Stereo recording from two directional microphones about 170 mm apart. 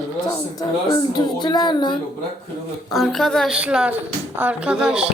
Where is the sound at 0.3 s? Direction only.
25° left (ahead or behind).